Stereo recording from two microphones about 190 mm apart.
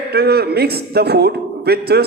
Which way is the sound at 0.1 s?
55° right (ahead or behind).